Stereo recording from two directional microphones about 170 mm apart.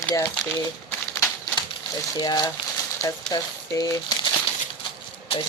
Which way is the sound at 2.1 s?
25° left (ahead or behind).